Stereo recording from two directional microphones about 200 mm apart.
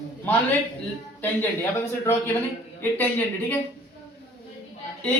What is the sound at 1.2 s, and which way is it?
Speech, 10° left (ahead or behind).